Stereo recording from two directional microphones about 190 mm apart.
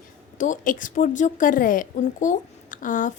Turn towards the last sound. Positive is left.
turn(degrees=45)  # may be behind; listen again after turning